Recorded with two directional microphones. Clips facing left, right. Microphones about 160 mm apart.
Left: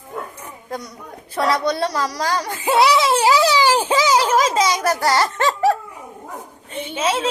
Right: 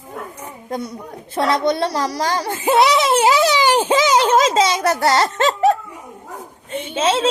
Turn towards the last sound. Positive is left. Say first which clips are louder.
# right 3 dB
turn(degrees=-30)  # may be behind; listen again after turning